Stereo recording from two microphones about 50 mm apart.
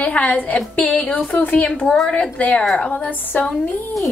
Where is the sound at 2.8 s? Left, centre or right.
Left.